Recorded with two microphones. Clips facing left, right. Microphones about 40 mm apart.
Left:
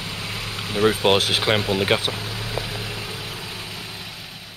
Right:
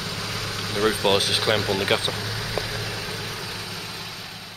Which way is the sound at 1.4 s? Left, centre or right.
Left.